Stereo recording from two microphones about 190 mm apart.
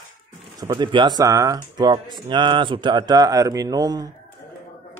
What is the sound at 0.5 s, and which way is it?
Speech, 20° right (ahead or behind).